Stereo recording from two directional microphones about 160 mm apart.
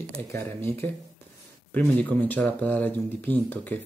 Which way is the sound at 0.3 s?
15° left (ahead or behind).